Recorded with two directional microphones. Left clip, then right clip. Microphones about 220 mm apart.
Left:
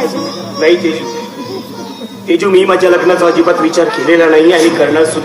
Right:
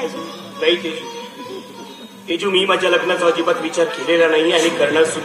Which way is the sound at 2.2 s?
50° left (ahead or behind).